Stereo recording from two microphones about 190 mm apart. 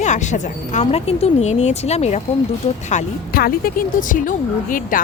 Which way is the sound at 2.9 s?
45° left (ahead or behind).